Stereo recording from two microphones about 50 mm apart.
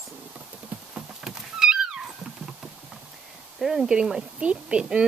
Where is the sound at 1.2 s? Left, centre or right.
Centre.